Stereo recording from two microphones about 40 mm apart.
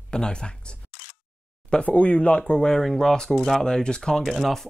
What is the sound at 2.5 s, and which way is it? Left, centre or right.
Speech, centre.